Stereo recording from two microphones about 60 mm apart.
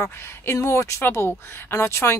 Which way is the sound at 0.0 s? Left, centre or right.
Left.